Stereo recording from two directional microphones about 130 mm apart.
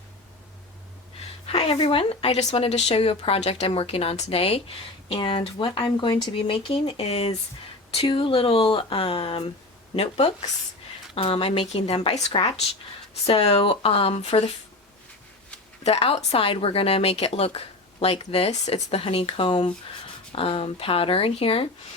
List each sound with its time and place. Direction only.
1.5 s speech: 50° left (ahead or behind)
15.8 s speech: 50° left (ahead or behind)